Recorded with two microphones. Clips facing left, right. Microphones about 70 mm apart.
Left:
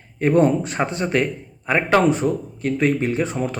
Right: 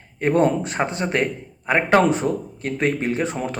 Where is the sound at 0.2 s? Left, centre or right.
Right.